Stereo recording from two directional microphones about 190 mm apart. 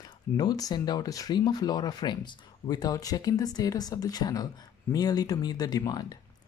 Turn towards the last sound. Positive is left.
turn(degrees=20)  # may be behind; listen again after turning